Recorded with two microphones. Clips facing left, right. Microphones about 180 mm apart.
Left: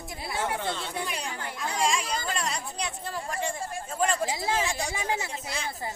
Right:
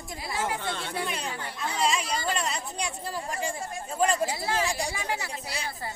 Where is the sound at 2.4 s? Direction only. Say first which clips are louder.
Right 1 dB; 5° right (ahead or behind).